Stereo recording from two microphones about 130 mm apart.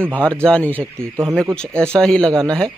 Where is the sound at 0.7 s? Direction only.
20° right (ahead or behind).